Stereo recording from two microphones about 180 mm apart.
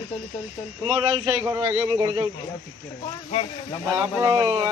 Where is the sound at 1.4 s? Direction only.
10° right (ahead or behind).